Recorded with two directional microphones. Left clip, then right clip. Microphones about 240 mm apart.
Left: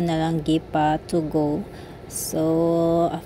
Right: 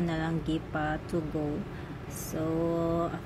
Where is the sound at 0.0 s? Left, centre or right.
Left.